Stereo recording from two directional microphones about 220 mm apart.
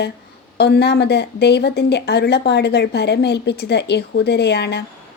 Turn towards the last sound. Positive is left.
turn(degrees=50)  # may be behind; listen again after turning